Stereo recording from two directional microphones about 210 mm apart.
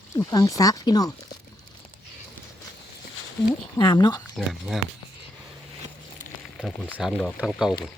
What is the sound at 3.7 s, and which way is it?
Speech, 20° left (ahead or behind).